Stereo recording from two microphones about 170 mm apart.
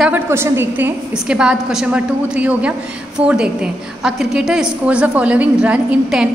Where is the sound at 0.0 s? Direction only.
15° right (ahead or behind).